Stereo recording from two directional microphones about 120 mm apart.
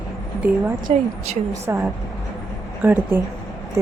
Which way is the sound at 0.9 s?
55° right (ahead or behind).